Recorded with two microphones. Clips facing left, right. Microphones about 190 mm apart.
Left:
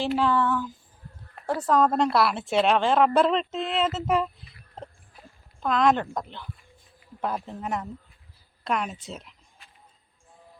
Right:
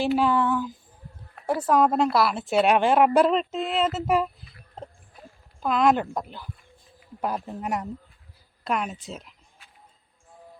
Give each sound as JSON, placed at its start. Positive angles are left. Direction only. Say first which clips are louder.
{"t": 0.2, "sound": "speech", "louder": "right 1 dB", "side_deg": -15}
{"t": 1.9, "sound": "speech", "louder": "right 1 dB", "side_deg": 0}
{"t": 8.6, "sound": "speech", "louder": "right 1 dB", "side_deg": -5}